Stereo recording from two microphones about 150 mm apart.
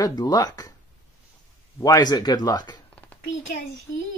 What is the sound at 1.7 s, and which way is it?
Speech, 20° left (ahead or behind).